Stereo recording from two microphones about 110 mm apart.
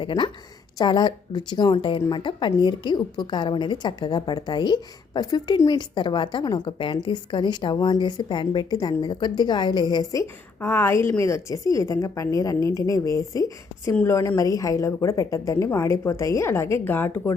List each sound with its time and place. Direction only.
0.0 s a woman's voice: 50° left (ahead or behind)
10.6 s a woman's voice: 20° left (ahead or behind)